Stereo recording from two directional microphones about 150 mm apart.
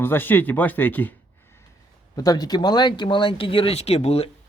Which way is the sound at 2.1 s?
25° left (ahead or behind).